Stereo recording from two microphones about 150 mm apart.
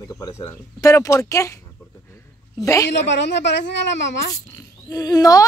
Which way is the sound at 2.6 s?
20° left (ahead or behind).